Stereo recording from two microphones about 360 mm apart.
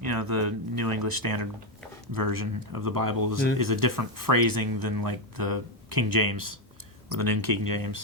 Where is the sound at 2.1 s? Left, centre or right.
Right.